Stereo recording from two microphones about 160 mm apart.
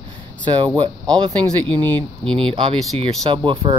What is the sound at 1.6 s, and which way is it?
Speech, 10° left (ahead or behind).